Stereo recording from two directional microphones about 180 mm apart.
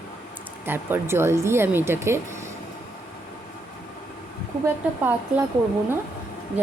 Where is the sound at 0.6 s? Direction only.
10° right (ahead or behind).